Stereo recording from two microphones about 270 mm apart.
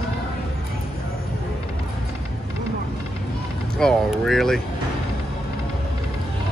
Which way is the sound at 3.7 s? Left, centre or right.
Centre.